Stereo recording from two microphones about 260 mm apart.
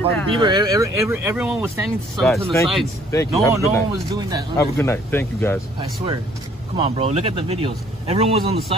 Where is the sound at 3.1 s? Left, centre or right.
Centre.